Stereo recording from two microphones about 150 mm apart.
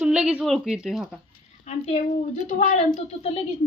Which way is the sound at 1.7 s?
45° left (ahead or behind).